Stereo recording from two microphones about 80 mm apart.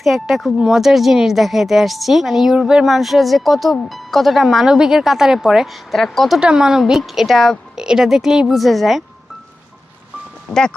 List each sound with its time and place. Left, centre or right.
0.0 s speech: centre
10.5 s speech: left